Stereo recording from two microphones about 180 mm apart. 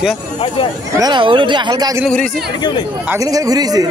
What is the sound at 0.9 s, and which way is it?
Speech, 25° right (ahead or behind).